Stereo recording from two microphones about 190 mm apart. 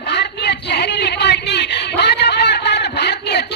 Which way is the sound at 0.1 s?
60° left (ahead or behind).